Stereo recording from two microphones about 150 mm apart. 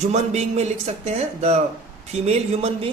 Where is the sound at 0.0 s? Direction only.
50° right (ahead or behind).